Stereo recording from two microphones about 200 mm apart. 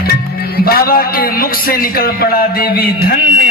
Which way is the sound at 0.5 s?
50° left (ahead or behind).